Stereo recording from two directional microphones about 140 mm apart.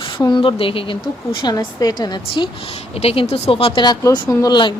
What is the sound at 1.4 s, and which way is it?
A woman's voice, 30° left (ahead or behind).